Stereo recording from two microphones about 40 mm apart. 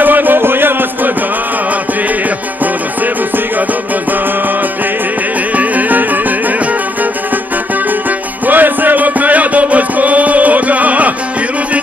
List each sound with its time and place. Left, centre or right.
0.0 s music: right
5.6 s music: right
8.5 s music: right